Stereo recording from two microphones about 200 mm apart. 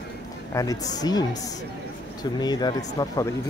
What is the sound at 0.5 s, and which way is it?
Speech, 15° left (ahead or behind).